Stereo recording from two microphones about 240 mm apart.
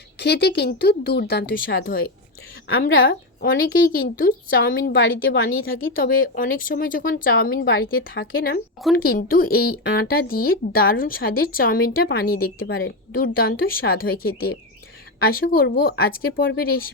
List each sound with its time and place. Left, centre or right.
0.2 s speech: left
2.7 s a woman's voice: left
3.9 s speech: left
4.9 s speech: left
6.0 s speech: left